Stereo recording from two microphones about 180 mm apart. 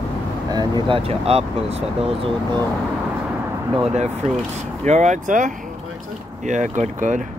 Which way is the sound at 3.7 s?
5° right (ahead or behind).